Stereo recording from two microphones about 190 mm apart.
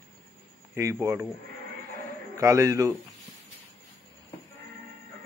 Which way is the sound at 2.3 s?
15° right (ahead or behind).